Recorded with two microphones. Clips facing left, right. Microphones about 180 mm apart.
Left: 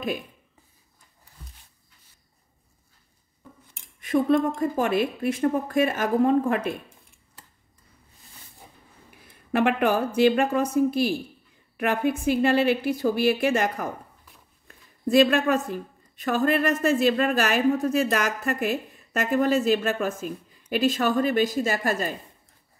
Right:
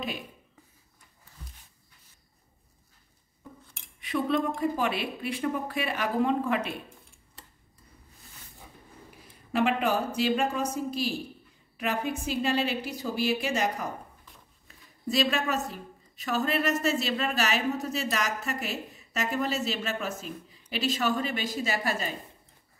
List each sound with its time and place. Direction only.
4.0 s a woman's voice: 45° left (ahead or behind)
9.5 s a woman's voice: 55° left (ahead or behind)
15.0 s a woman's voice: 55° left (ahead or behind)